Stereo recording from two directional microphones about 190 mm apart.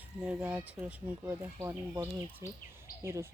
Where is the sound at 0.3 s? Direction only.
10° right (ahead or behind).